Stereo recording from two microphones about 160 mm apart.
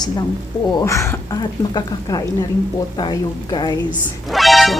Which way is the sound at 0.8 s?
20° left (ahead or behind).